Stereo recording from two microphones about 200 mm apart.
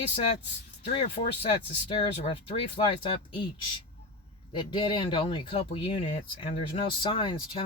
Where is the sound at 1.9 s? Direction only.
30° left (ahead or behind).